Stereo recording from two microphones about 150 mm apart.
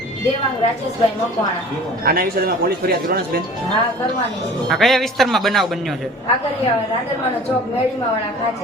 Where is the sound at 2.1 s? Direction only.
80° right.